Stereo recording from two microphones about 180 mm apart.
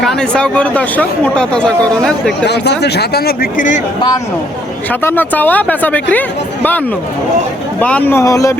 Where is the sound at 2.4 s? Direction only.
70° left (ahead or behind); by 3.8 s 45° left (ahead or behind).